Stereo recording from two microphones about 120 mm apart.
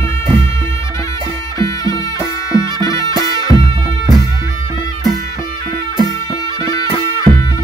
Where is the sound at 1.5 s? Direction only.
25° left (ahead or behind).